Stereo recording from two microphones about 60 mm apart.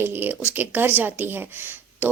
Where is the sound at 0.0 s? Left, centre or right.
Right.